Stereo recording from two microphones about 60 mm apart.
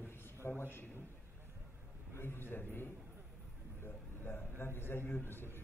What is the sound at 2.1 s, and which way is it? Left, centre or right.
Speech, left.